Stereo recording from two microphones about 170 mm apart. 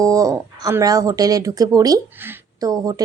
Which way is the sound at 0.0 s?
20° right (ahead or behind).